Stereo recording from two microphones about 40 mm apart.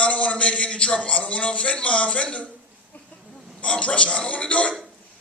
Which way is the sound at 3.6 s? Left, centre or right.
Left.